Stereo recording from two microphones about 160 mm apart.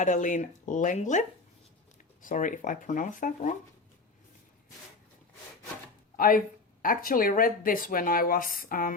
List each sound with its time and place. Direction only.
0.0 s speech: 50° left (ahead or behind)
2.2 s speech: 55° left (ahead or behind)
6.1 s speech: 60° left (ahead or behind)